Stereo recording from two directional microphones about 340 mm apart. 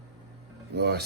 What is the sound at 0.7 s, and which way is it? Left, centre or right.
Speech, right.